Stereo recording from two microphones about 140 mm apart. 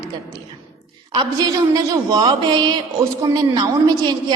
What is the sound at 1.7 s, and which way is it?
A woman's voice, 25° right (ahead or behind).